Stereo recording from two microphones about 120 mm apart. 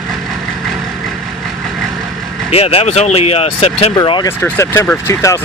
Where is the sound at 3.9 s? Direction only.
40° left (ahead or behind).